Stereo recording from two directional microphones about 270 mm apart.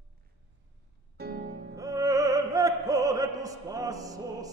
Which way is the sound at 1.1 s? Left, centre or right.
Right.